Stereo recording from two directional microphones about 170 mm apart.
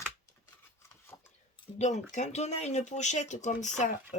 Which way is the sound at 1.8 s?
45° left (ahead or behind).